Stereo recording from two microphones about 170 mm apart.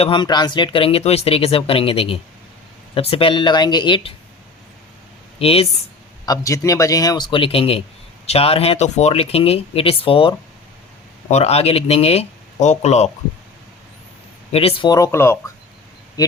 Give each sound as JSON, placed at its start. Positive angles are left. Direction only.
{"t": 0.0, "sound": "speech", "side_deg": 25}
{"t": 5.4, "sound": "speech", "side_deg": 35}
{"t": 6.2, "sound": "speech", "side_deg": 20}
{"t": 14.5, "sound": "speech", "side_deg": 35}
{"t": 14.9, "sound": "speech", "side_deg": 20}